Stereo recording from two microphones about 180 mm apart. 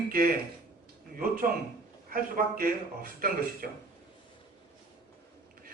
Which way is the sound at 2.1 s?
55° right (ahead or behind).